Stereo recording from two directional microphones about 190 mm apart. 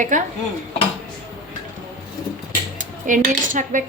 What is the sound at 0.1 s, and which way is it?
Speech, 40° right (ahead or behind).